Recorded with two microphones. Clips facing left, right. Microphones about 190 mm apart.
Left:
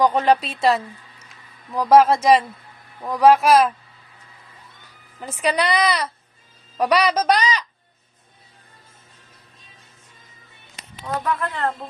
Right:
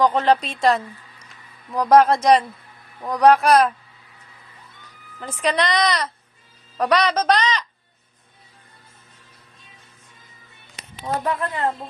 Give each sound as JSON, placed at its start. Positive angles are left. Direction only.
{"t": 0.0, "sound": "speech", "side_deg": 10}
{"t": 5.2, "sound": "a woman's voice", "side_deg": 10}
{"t": 11.0, "sound": "speech", "side_deg": -25}